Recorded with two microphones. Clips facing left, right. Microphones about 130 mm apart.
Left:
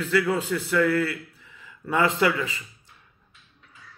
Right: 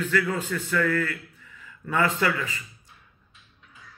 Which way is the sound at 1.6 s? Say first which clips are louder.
Left 2 dB; 25° left (ahead or behind).